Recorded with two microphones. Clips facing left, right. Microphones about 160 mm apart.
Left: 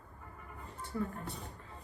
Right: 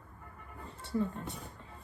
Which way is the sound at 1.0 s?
20° right (ahead or behind).